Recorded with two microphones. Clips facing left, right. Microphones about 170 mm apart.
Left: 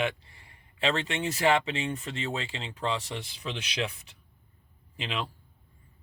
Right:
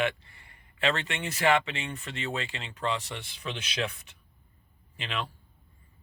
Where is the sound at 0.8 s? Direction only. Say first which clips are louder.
Left 1 dB; 30° left (ahead or behind).